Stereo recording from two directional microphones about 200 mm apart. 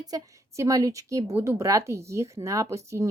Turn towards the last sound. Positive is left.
turn(degrees=-15)  # may be behind; listen again after turning